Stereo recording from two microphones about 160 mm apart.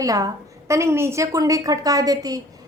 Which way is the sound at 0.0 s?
20° right (ahead or behind).